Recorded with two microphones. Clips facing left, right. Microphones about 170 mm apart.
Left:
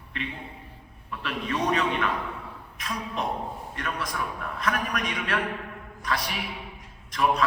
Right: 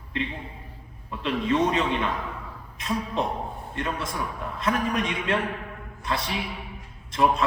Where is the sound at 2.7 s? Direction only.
25° right (ahead or behind).